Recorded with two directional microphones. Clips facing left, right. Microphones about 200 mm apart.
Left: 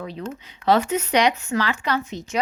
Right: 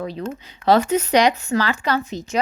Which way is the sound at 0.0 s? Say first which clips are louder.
Right 4 dB; 40° right (ahead or behind).